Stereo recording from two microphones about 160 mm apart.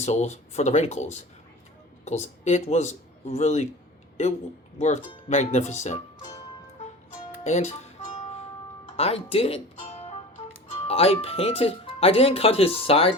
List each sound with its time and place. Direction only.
0.0 s speech: 45° left (ahead or behind)
4.8 s speech: 45° left (ahead or behind)
7.4 s music: 45° left (ahead or behind)
9.0 s speech: 40° left (ahead or behind)